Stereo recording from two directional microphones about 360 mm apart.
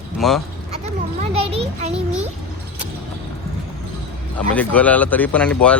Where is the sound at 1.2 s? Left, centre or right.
Centre.